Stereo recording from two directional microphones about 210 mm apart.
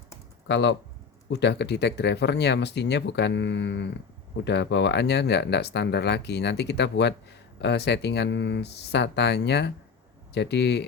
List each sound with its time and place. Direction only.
0.4 s speech: 55° left (ahead or behind)